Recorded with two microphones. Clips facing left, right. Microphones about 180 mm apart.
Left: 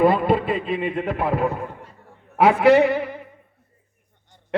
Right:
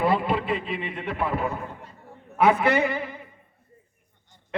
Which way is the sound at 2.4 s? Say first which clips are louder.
Left 6 dB; 70° left (ahead or behind).